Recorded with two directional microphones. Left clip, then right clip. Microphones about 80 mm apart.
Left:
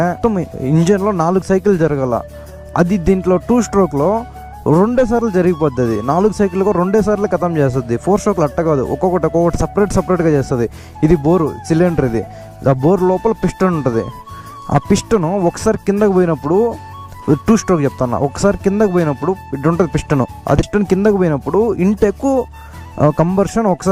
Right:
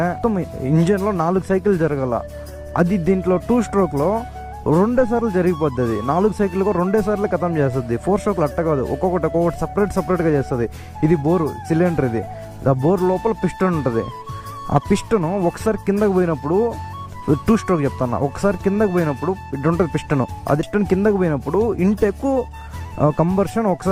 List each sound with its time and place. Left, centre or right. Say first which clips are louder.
0.0 s speech: left 4 dB; left